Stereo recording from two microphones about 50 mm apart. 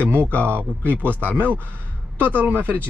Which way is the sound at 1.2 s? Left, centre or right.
Right.